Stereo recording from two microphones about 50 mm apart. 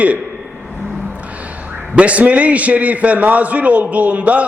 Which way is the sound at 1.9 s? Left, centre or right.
Right.